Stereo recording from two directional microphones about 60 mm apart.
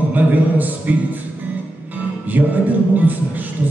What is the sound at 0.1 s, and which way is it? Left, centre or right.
Speech, right.